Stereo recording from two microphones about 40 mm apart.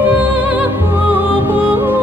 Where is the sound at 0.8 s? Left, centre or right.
Right.